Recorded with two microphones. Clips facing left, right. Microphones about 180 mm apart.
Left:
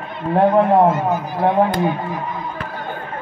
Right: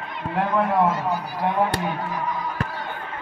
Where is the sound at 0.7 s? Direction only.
50° left (ahead or behind).